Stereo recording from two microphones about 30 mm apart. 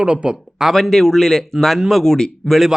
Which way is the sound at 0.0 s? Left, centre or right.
Right.